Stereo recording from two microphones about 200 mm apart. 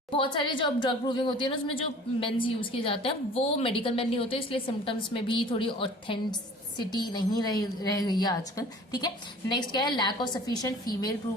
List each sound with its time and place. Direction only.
0.1 s a woman's voice: 25° left (ahead or behind)